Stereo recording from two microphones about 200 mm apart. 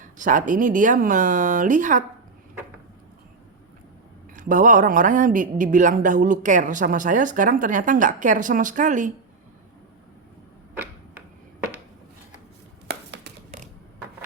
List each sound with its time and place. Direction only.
0.0 s speech: 40° right (ahead or behind)
4.4 s speech: 40° right (ahead or behind)
12.9 s chopping: 55° right (ahead or behind)